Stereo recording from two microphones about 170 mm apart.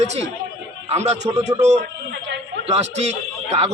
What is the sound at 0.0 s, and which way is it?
A man's voice, 40° right (ahead or behind).